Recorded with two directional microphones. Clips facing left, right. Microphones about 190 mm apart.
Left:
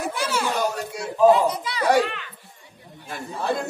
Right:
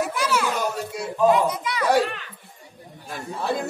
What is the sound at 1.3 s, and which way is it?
Speech, 30° left (ahead or behind).